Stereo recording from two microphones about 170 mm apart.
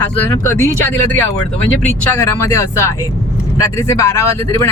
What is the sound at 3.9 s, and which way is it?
Speech, 15° left (ahead or behind).